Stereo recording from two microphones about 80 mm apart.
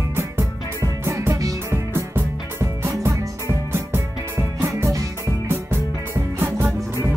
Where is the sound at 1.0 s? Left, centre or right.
Right.